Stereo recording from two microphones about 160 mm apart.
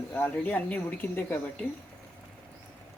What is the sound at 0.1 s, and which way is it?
Speech, 10° left (ahead or behind).